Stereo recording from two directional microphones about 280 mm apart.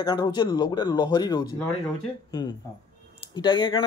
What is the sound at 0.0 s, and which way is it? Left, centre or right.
Speech, centre.